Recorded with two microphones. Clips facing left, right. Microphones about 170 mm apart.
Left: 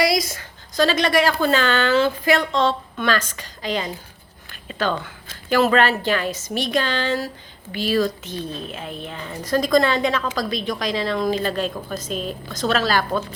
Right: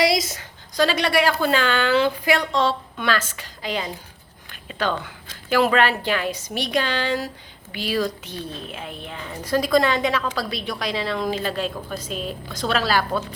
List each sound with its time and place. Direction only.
0.0 s a woman's voice: 25° right (ahead or behind); by 3.8 s 5° right (ahead or behind)
5.5 s a woman's voice: 10° right (ahead or behind)
12.1 s a woman's voice: 40° left (ahead or behind)
12.5 s a woman's voice: 10° right (ahead or behind)